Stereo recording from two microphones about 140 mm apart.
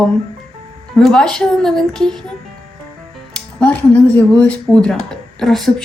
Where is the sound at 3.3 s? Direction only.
10° left (ahead or behind).